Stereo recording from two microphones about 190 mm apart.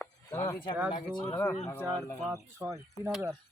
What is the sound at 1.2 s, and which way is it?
Speech, 10° left (ahead or behind).